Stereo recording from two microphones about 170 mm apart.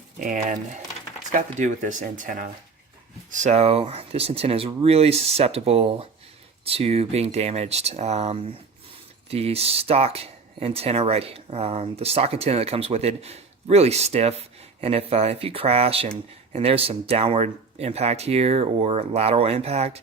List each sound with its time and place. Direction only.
0.2 s speech: 50° right (ahead or behind)